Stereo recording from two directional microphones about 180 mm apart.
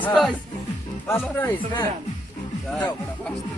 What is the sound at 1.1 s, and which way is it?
Speech, 10° left (ahead or behind).